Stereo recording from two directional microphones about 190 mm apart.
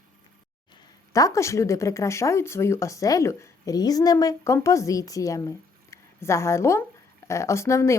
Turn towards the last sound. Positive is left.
turn(degrees=15)  # may be behind; listen again after turning